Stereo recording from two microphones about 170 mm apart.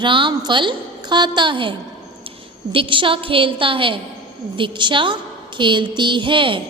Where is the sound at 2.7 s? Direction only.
30° right (ahead or behind).